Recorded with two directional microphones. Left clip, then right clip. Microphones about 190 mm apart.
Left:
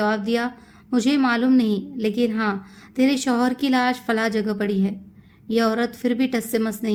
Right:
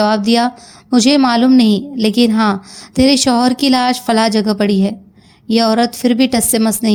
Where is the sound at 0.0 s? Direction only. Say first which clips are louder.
Right 9 dB; 35° right (ahead or behind).